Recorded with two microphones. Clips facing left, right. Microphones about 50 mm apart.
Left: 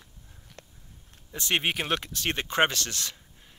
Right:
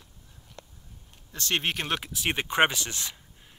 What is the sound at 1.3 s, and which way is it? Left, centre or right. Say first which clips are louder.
Speech: left 1 dB; centre.